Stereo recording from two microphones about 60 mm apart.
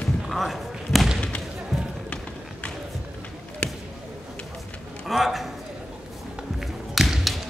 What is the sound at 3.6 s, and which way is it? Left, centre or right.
Basketball bounce, left.